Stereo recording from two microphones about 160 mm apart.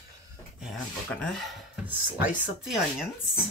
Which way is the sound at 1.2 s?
Centre (ahead or behind).